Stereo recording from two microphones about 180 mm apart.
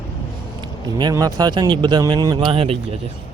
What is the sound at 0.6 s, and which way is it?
Speech, 25° right (ahead or behind).